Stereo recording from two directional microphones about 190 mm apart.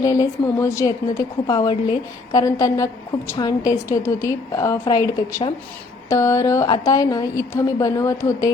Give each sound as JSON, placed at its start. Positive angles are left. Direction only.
{"t": 0.0, "sound": "a woman's voice", "side_deg": 20}